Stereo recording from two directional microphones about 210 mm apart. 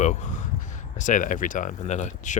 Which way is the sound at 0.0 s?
35° left (ahead or behind).